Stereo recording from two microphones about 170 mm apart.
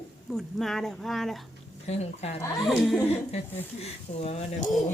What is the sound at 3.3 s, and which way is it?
Speech, 35° left (ahead or behind).